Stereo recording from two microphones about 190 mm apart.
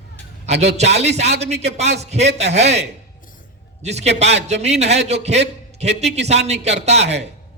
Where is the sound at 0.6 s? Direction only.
35° right (ahead or behind).